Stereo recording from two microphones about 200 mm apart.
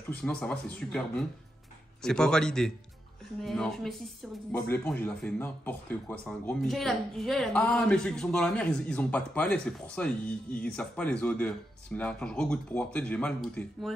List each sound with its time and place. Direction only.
0.2 s speech: 5° left (ahead or behind)
2.0 s speech: 5° left (ahead or behind)